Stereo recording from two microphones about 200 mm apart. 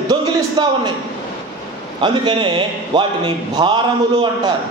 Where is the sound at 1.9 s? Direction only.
25° right (ahead or behind).